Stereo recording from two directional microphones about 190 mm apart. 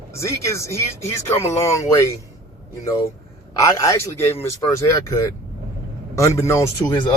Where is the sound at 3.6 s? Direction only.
15° left (ahead or behind).